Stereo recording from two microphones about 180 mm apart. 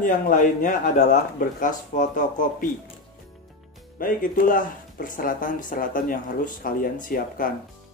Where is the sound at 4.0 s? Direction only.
50° left (ahead or behind).